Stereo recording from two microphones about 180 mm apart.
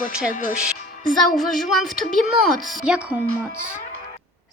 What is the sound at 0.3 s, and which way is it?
Speech, 45° left (ahead or behind).